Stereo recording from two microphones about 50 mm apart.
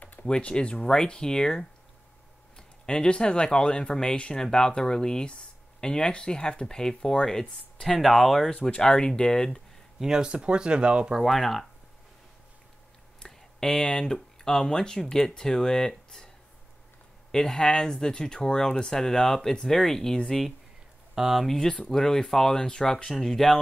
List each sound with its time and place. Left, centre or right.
0.2 s speech: centre
8.5 s speech: left
9.9 s speech: centre
11.1 s speech: centre
13.2 s speech: centre
17.3 s speech: centre
21.1 s speech: centre
21.5 s speech: centre